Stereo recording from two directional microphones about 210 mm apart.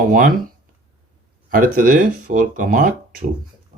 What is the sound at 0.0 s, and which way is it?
Speech, 40° right (ahead or behind).